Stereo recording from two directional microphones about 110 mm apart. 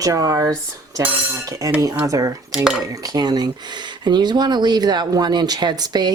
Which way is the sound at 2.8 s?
35° right (ahead or behind).